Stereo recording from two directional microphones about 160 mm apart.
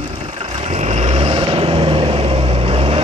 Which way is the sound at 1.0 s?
40° right (ahead or behind).